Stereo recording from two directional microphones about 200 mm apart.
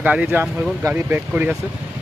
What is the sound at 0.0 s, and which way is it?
Speech, 5° right (ahead or behind).